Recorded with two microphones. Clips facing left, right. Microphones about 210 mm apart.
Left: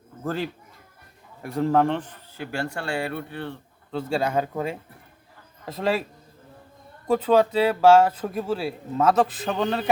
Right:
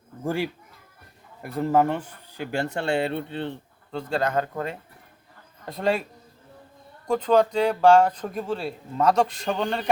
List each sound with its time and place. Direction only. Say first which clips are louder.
0.3 s a man's voice: right 1 dB; 10° right (ahead or behind)
3.9 s speech: left 1 dB; 10° left (ahead or behind)
7.1 s speech: left 1 dB; 5° left (ahead or behind)